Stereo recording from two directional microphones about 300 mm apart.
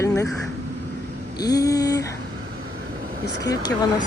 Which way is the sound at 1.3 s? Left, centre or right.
Centre.